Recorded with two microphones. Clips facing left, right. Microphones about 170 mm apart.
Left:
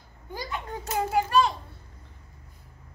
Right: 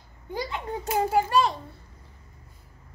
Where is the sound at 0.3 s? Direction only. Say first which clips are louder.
Right 4 dB; 25° right (ahead or behind).